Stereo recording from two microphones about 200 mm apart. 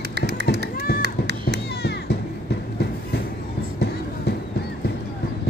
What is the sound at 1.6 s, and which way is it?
Music, 55° left (ahead or behind).